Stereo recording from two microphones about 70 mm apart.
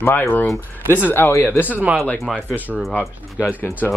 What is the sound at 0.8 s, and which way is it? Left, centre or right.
Speech, right.